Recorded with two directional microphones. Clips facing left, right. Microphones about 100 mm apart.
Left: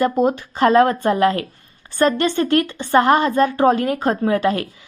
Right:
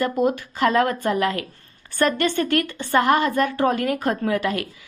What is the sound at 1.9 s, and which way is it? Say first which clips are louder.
A woman's voice: left 3 dB; 25° left (ahead or behind).